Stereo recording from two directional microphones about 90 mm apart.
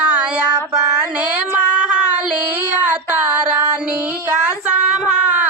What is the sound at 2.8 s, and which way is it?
Child singing, 15° right (ahead or behind).